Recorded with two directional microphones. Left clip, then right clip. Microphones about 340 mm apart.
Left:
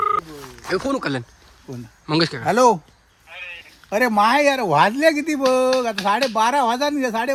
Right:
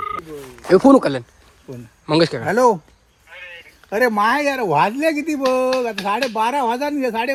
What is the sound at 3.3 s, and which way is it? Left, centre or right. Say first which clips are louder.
Speech: left 2 dB; left.